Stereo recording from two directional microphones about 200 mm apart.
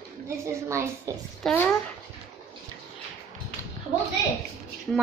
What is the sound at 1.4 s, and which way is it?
Speech, 10° left (ahead or behind).